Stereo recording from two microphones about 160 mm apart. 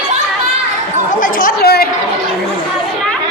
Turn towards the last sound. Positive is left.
turn(degrees=75)  # may be behind; listen again after turning